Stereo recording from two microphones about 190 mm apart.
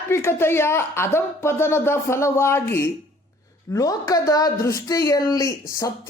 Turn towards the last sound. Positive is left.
turn(degrees=15)  # may be behind; listen again after turning